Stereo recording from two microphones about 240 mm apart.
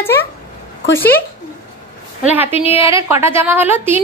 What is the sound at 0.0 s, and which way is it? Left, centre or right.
Speech, centre.